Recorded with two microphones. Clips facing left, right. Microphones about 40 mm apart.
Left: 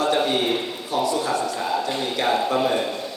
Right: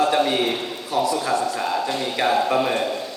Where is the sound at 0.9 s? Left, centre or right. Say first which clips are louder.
Right 1 dB; left.